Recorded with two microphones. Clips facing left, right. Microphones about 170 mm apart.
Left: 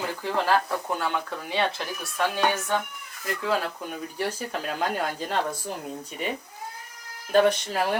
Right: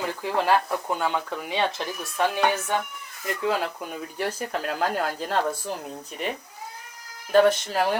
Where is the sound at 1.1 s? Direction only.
20° right (ahead or behind).